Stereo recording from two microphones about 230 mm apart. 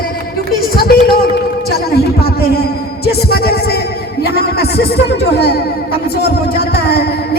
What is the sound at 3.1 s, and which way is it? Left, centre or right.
Music, left.